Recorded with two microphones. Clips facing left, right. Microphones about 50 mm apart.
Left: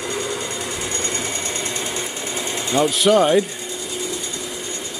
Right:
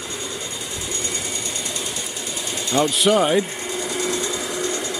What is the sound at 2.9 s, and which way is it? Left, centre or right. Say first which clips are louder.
Speech: left 3 dB; centre.